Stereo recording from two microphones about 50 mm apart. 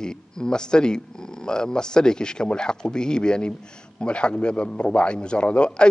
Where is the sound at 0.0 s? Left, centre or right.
Centre.